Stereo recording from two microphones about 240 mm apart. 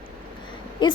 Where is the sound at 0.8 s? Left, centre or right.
Centre.